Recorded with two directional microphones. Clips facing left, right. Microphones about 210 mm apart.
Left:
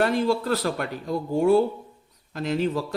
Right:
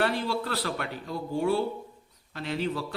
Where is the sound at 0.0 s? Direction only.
45° left (ahead or behind).